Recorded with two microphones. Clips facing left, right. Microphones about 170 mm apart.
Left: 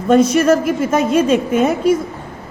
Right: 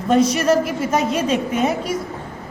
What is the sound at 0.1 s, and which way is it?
A woman's voice, 50° left (ahead or behind).